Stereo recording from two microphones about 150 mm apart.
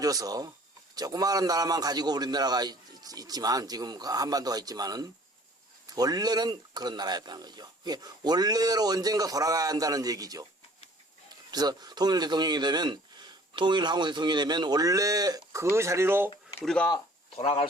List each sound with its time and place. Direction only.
0.0 s speech: 25° right (ahead or behind)
11.5 s speech: 25° right (ahead or behind)
16.6 s speech: 10° left (ahead or behind)
17.3 s speech: 40° left (ahead or behind)